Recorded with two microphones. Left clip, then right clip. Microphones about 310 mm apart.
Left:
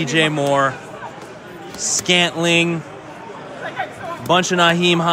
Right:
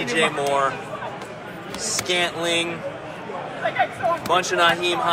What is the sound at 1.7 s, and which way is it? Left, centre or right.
Speech, left.